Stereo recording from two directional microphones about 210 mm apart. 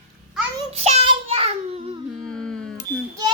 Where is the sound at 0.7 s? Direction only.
30° right (ahead or behind).